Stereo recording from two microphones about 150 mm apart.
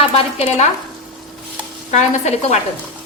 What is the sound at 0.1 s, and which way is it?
Speech, 45° left (ahead or behind).